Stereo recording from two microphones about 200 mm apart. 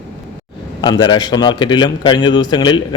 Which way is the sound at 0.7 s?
20° left (ahead or behind).